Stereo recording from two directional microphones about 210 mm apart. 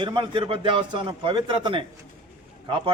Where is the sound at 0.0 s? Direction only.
20° right (ahead or behind).